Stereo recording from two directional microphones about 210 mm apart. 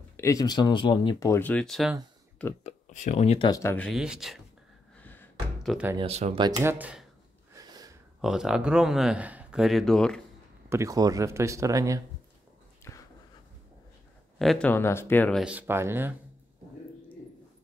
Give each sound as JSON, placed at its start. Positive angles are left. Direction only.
{"t": 0.2, "sound": "speech", "side_deg": 15}
{"t": 2.6, "sound": "speech", "side_deg": 35}
{"t": 4.9, "sound": "a sound", "side_deg": 10}
{"t": 5.9, "sound": "speech", "side_deg": -30}
{"t": 7.5, "sound": "a sound", "side_deg": -20}
{"t": 8.2, "sound": "speech", "side_deg": 0}
{"t": 10.7, "sound": "speech", "side_deg": -15}
{"t": 12.9, "sound": "writing", "side_deg": 15}
{"t": 14.4, "sound": "speech", "side_deg": 5}
{"t": 15.4, "sound": "speech", "side_deg": -10}